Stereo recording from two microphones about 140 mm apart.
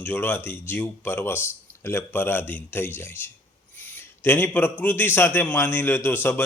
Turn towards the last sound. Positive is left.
turn(degrees=15)  # may be behind; listen again after turning